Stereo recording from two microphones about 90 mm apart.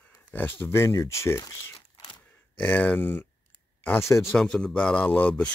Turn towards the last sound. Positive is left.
turn(degrees=15)  # may be behind; listen again after turning